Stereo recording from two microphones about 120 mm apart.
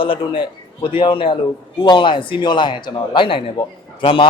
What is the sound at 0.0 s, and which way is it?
A man's voice, 45° left (ahead or behind).